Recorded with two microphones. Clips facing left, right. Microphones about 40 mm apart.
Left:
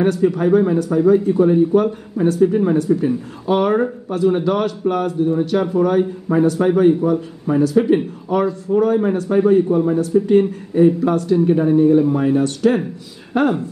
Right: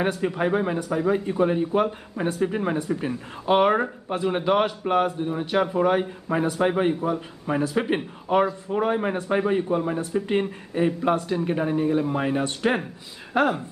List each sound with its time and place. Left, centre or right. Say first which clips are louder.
0.0 s a man's voice: left 8 dB; centre
12.2 s a man's voice: left 8 dB; right
13.3 s speech: left 5 dB; centre